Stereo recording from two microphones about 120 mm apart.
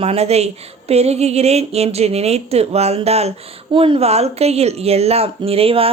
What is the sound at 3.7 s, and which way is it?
A woman's voice, 45° right (ahead or behind).